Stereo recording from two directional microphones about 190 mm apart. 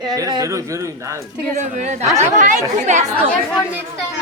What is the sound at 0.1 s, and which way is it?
Speech, 20° right (ahead or behind).